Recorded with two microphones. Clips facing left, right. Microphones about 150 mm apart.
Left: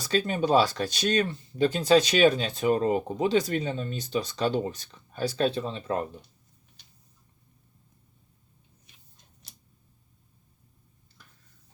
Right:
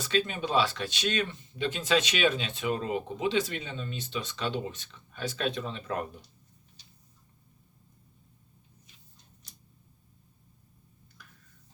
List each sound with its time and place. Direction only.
0.0 s speech: 40° left (ahead or behind)